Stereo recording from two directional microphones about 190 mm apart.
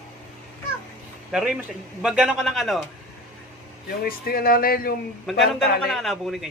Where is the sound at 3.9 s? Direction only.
50° left (ahead or behind).